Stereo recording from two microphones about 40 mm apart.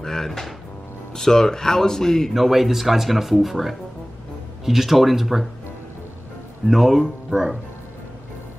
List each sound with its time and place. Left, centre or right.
0.0 s music: centre
1.1 s speech: centre
2.3 s speech: centre
6.7 s speech: centre
7.2 s speech: centre